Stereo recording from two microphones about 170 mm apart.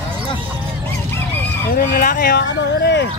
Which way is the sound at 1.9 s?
55° left (ahead or behind).